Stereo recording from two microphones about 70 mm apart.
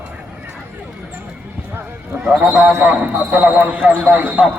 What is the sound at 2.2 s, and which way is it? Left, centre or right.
Speech, centre.